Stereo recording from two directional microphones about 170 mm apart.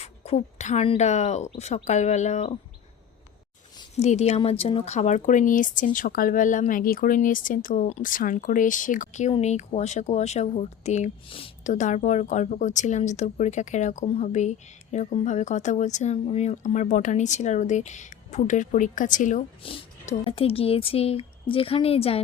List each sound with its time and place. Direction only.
0.0 s speech: 40° left (ahead or behind)
3.9 s speech: 40° left (ahead or behind)
11.6 s speech: 45° left (ahead or behind)
19.6 s speech: 35° left (ahead or behind)